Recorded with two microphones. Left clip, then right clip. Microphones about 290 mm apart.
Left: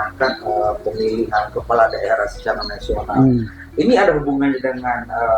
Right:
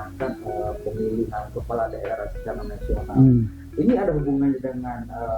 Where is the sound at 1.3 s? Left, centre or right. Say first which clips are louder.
Left 11 dB; centre.